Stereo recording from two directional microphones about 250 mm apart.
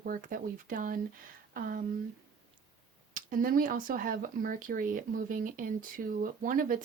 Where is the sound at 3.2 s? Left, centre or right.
Right.